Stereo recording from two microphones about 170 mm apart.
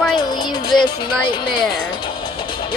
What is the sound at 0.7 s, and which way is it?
Speech, 25° left (ahead or behind).